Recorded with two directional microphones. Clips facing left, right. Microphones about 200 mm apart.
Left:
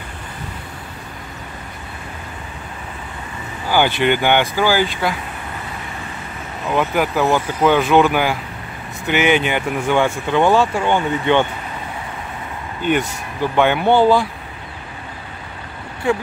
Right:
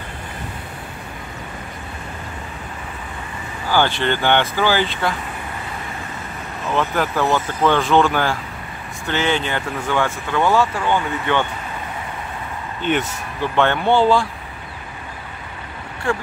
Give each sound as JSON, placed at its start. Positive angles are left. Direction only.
{"t": 3.7, "sound": "speech", "side_deg": 15}
{"t": 6.7, "sound": "speech", "side_deg": 10}
{"t": 12.8, "sound": "speech", "side_deg": 10}